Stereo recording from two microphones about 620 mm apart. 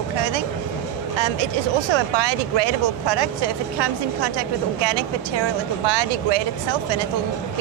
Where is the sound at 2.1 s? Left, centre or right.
Right.